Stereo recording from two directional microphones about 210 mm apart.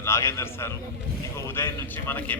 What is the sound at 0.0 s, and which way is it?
Speech, 15° left (ahead or behind).